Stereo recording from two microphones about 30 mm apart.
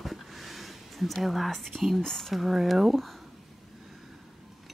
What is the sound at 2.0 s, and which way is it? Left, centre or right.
Speech, centre.